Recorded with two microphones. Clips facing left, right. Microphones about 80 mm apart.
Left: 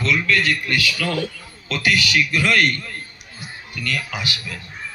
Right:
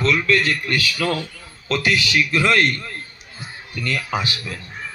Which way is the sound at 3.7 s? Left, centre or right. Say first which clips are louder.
Right 3 dB; right.